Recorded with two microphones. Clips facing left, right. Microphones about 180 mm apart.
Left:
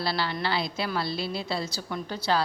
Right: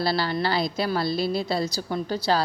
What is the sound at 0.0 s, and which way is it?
A woman's voice, 40° right (ahead or behind).